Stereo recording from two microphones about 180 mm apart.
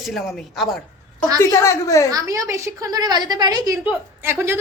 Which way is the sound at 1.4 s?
15° left (ahead or behind).